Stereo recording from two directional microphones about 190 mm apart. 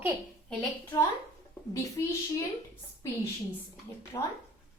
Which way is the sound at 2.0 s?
15° left (ahead or behind).